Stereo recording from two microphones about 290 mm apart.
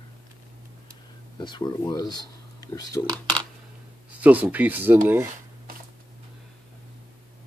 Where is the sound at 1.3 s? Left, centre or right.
Centre.